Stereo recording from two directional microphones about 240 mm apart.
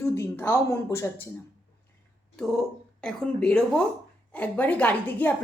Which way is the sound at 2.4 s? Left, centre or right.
Centre.